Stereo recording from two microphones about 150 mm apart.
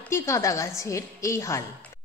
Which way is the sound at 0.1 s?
20° left (ahead or behind).